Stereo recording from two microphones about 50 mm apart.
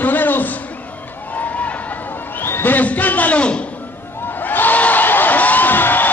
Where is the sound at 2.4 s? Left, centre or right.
Left.